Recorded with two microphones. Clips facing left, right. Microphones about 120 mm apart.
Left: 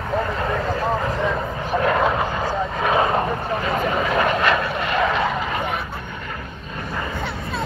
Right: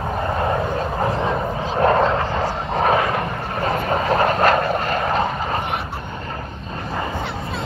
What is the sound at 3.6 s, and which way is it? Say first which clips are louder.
Vehicle: right 4 dB; 40° right (ahead or behind).